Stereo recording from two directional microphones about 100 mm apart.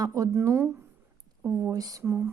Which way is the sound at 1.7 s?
35° right (ahead or behind).